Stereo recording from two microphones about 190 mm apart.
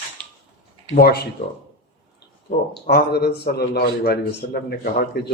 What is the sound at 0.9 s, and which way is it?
Speech, 60° left (ahead or behind).